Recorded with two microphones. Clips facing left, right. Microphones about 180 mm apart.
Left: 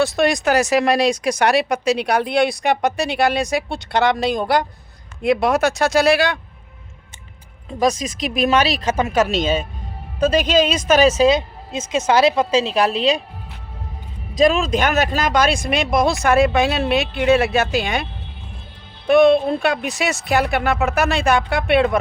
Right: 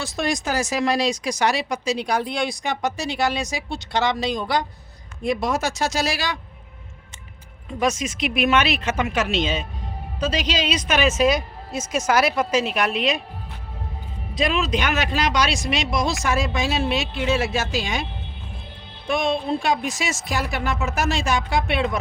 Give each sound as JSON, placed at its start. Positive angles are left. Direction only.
{"t": 0.0, "sound": "speech", "side_deg": 65}
{"t": 7.8, "sound": "a woman's voice", "side_deg": 35}
{"t": 14.3, "sound": "speech", "side_deg": 45}
{"t": 19.0, "sound": "speech", "side_deg": 60}